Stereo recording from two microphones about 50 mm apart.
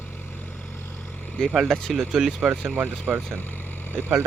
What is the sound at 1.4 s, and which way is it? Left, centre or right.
Speech, centre.